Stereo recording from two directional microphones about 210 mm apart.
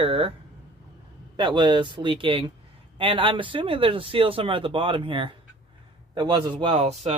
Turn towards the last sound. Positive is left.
turn(degrees=-30)  # may be behind; listen again after turning